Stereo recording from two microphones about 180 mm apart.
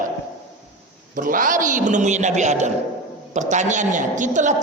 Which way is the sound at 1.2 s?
50° right (ahead or behind).